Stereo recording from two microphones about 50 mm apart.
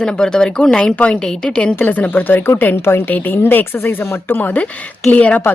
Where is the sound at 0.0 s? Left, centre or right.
Centre.